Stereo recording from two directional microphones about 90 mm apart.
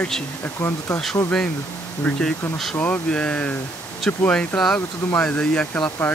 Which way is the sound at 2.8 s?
15° left (ahead or behind).